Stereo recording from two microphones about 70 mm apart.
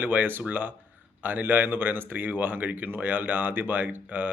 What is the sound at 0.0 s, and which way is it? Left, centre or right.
Speech, right.